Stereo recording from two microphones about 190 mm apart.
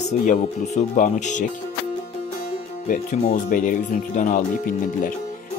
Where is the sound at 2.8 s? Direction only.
45° left (ahead or behind).